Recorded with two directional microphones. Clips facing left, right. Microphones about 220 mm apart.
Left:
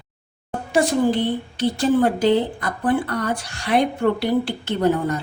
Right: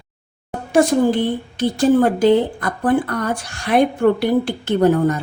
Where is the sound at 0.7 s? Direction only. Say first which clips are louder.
Right 4 dB; 45° right (ahead or behind).